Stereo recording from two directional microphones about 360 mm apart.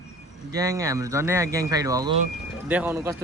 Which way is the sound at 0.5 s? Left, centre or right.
Centre.